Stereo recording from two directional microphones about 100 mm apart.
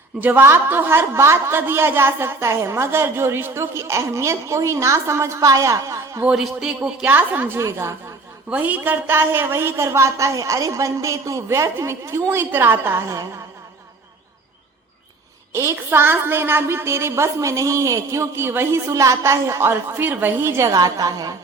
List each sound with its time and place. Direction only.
0.2 s a woman's voice: 20° right (ahead or behind)
6.2 s a woman's voice: 5° right (ahead or behind); by 7.9 s 30° right (ahead or behind)
8.4 s a woman's voice: 15° right (ahead or behind); by 13.2 s 30° right (ahead or behind)
15.5 s a woman's voice: 25° right (ahead or behind)
20.7 s a woman's voice: 35° right (ahead or behind)